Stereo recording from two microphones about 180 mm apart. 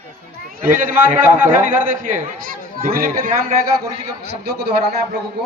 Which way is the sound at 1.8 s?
50° right (ahead or behind).